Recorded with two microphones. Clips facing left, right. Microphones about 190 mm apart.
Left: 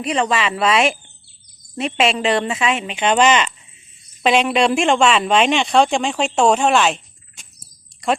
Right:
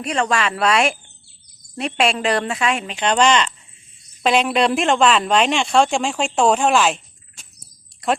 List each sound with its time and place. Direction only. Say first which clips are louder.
0.0 s speech: left 1 dB; centre (ahead or behind)